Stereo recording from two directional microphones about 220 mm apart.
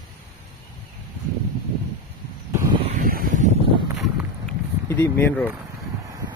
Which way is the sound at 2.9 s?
40° right (ahead or behind).